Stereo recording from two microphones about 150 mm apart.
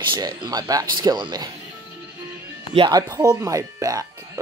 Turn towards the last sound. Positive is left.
turn(degrees=-20)  # may be behind; listen again after turning